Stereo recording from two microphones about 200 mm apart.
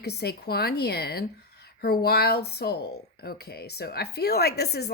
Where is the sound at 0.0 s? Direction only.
55° left (ahead or behind).